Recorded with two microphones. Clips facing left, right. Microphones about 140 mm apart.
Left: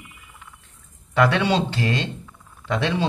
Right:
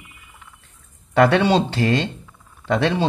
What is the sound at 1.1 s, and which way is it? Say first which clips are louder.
Speech: right 4 dB; 40° right (ahead or behind).